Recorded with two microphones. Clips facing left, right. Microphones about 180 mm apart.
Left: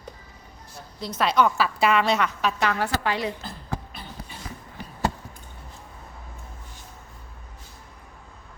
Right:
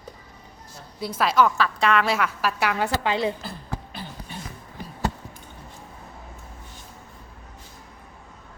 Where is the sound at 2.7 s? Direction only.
20° right (ahead or behind).